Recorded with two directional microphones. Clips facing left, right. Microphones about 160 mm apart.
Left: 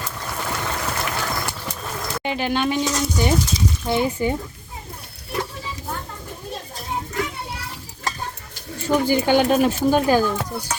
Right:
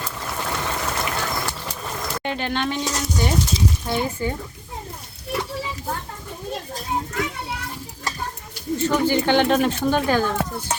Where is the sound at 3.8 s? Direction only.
15° left (ahead or behind).